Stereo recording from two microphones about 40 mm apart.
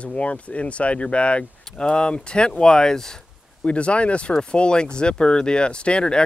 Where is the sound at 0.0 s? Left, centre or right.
Left; by 3.2 s centre.